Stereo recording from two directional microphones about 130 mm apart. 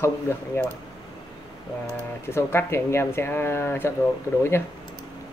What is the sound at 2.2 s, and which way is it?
Speech, 20° left (ahead or behind).